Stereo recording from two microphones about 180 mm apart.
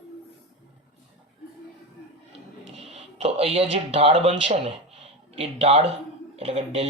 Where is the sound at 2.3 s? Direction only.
35° right (ahead or behind).